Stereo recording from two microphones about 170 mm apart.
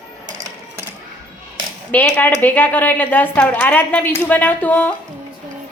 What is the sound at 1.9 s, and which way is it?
A woman's voice, 10° left (ahead or behind).